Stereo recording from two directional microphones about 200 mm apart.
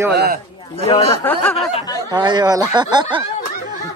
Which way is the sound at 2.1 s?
20° right (ahead or behind).